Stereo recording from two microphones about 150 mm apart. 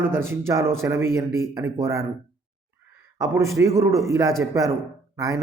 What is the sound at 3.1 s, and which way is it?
A man's voice, 20° right (ahead or behind).